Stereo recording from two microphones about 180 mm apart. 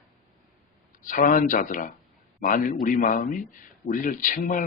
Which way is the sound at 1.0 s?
50° left (ahead or behind).